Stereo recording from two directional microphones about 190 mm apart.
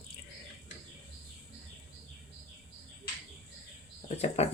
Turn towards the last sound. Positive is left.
turn(degrees=35)  # may be behind; listen again after turning